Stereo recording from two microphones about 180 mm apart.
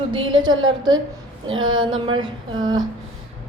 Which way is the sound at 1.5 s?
90° right.